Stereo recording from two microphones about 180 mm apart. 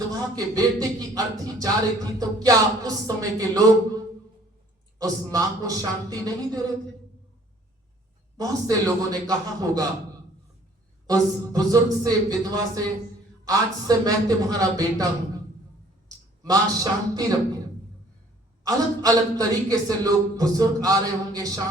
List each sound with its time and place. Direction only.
0.2 s a man's voice: 20° right (ahead or behind)
8.4 s a man's voice: 20° right (ahead or behind)
11.0 s a man's voice: 20° right (ahead or behind)
16.4 s a man's voice: 20° right (ahead or behind)
18.6 s a man's voice: 20° right (ahead or behind)